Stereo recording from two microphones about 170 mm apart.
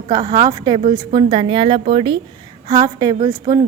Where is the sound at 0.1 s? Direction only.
25° right (ahead or behind).